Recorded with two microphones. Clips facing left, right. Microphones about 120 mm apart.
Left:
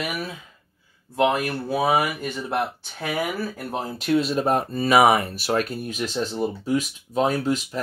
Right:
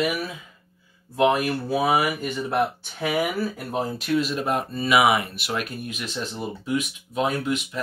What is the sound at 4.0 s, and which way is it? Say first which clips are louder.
Speech: left 6 dB; 30° left (ahead or behind).